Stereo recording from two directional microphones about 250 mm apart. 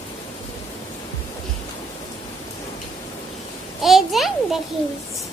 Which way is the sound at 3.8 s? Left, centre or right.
Centre.